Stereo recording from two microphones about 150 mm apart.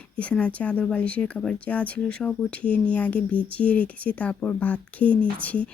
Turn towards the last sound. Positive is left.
turn(degrees=10)  # may be behind; listen again after turning